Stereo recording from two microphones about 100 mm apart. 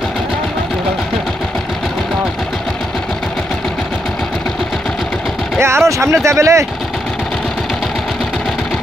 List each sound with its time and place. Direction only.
5.6 s speech: 25° right (ahead or behind)